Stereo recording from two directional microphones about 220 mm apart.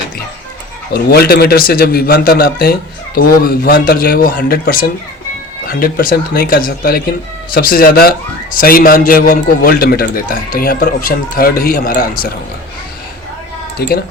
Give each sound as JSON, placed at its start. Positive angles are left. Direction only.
{"t": 0.9, "sound": "a man's voice", "side_deg": 45}
{"t": 13.7, "sound": "speech", "side_deg": 45}